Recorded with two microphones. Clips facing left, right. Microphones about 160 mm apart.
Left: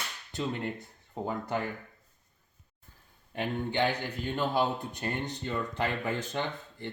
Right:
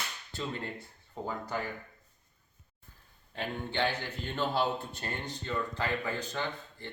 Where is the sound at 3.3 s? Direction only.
15° left (ahead or behind).